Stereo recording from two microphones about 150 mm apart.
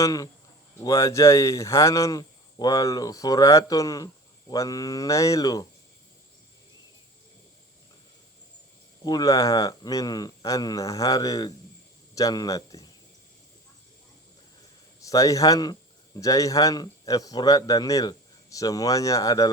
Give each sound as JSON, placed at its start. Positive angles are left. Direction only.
{"t": 0.0, "sound": "speech", "side_deg": 25}
{"t": 9.0, "sound": "a man's voice", "side_deg": 25}
{"t": 15.0, "sound": "a man's voice", "side_deg": 20}